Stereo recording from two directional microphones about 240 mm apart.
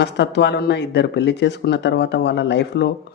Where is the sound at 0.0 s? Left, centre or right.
Left.